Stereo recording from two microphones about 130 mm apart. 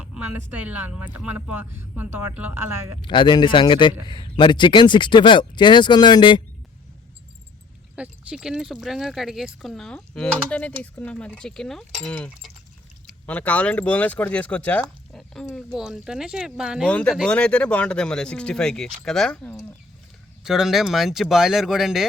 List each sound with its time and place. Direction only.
0.0 s speech: 10° right (ahead or behind)
3.0 s speech: 40° left (ahead or behind)
7.9 s speech: 10° right (ahead or behind)
16.8 s speech: 10° left (ahead or behind)
20.4 s speech: 5° right (ahead or behind)